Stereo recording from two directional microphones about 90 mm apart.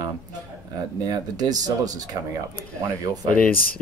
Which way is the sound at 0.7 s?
45° right (ahead or behind).